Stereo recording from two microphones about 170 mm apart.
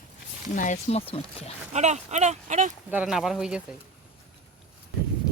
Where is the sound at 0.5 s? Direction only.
45° left (ahead or behind).